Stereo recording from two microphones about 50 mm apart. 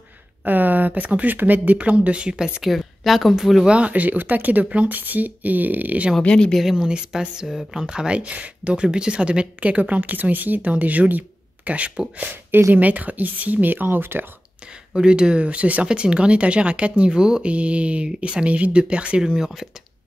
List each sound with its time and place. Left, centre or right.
0.5 s speech: right; by 2.7 s centre
2.7 s speech: centre
3.6 s speech: right
6.2 s speech: centre
6.6 s speech: centre; by 11.9 s right
12.2 s speech: right
12.7 s speech: right
15.0 s speech: centre
19.2 s speech: centre